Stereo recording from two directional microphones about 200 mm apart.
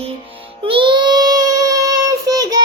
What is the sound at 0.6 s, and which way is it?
Child singing, 25° right (ahead or behind).